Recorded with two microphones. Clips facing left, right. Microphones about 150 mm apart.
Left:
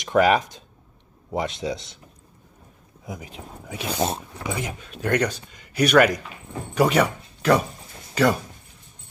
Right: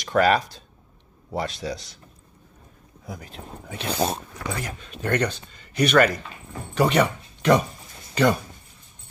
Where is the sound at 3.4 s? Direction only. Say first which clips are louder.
Left 1 dB; 5° left (ahead or behind).